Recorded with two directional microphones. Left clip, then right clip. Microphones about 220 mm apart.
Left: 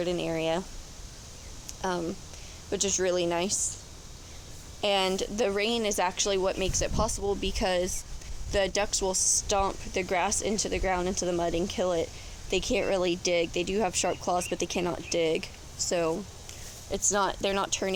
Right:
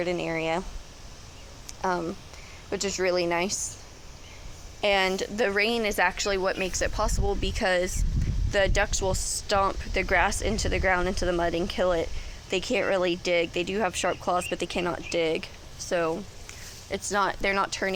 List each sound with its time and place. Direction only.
0.0 s speech: centre (ahead or behind)
1.6 s a sound: 5° right (ahead or behind)
2.6 s speech: centre (ahead or behind)
4.8 s speech: centre (ahead or behind)